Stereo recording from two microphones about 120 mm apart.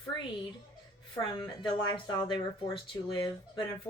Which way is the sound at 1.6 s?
35° left (ahead or behind).